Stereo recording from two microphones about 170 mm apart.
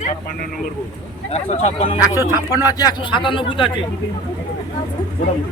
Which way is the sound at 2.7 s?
25° left (ahead or behind).